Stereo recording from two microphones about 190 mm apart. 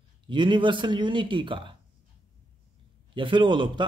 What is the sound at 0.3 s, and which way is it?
Speech, 25° right (ahead or behind).